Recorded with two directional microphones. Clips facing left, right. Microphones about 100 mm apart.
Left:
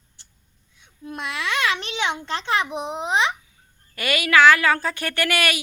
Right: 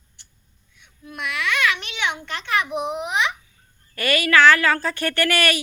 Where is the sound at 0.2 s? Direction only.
30° left (ahead or behind).